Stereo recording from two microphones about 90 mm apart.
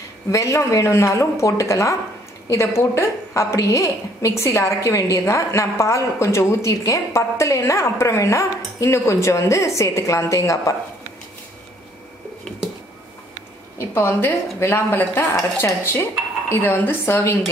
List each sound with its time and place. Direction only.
0.3 s a woman's voice: 35° left (ahead or behind)
13.7 s a woman's voice: 25° left (ahead or behind)